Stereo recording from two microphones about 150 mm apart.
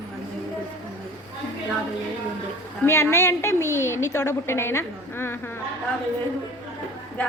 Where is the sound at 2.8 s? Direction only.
20° left (ahead or behind).